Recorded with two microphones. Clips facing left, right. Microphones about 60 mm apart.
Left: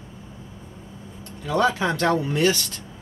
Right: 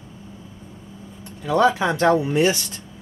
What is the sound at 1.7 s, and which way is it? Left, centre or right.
Speech, centre.